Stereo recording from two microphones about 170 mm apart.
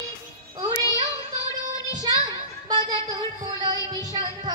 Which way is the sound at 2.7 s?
25° right (ahead or behind).